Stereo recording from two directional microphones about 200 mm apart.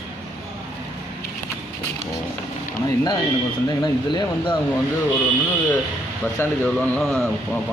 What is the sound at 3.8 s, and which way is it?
Speech, 20° left (ahead or behind).